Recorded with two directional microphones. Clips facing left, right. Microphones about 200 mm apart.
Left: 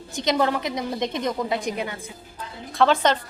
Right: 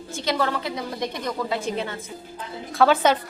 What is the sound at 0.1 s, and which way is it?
A woman's voice, 20° left (ahead or behind).